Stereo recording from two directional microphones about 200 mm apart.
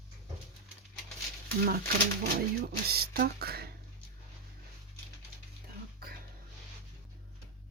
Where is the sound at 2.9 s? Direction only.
50° right (ahead or behind).